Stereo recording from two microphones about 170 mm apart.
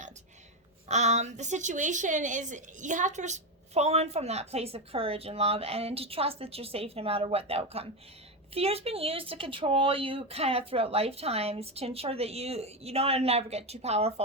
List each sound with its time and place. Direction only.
0.9 s a woman's voice: 45° right (ahead or behind)